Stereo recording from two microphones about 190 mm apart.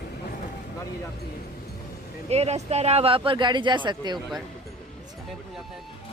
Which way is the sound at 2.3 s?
35° right (ahead or behind).